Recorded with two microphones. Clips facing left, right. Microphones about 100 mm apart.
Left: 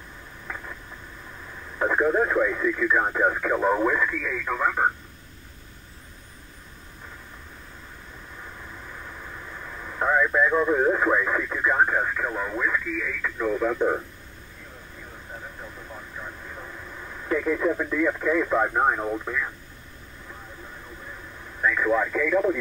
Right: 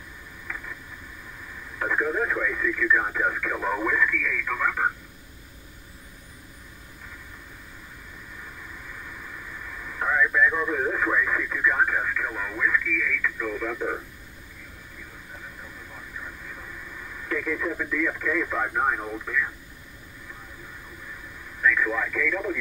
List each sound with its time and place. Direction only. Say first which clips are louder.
0.5 s a sound: left 1 dB; 25° left (ahead or behind)
1.8 s speech: left 4 dB; 25° left (ahead or behind)
9.5 s speech: left 1 dB; 25° left (ahead or behind)
16.2 s speech: left 1 dB; 25° left (ahead or behind)
21.5 s speech: left 2 dB; 30° left (ahead or behind)